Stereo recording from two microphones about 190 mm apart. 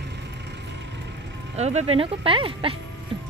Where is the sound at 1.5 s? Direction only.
35° right (ahead or behind).